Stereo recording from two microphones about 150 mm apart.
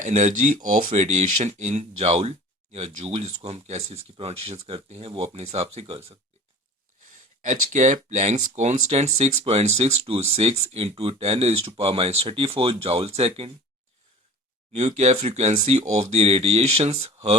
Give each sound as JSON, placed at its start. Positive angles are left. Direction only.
{"t": 0.0, "sound": "speech", "side_deg": -50}
{"t": 7.1, "sound": "speech", "side_deg": -55}
{"t": 14.7, "sound": "speech", "side_deg": -45}